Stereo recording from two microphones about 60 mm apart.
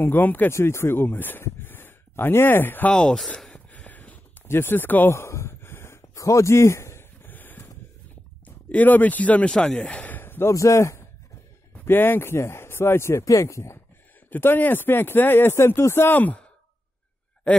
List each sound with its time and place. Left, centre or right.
0.0 s speech: left
0.5 s speech: left
1.4 s a sound: left
2.9 s speech: centre
3.5 s a sound: left
4.5 s speech: left
5.1 s a sound: left
6.1 s a man's voice: left
7.2 s a sound: left
8.7 s speech: left
10.5 s a man's voice: left
11.8 s speech: left
13.2 s a man's voice: left
14.3 s speech: left